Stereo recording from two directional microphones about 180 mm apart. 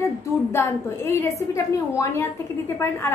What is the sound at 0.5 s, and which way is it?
A woman's voice, 15° left (ahead or behind).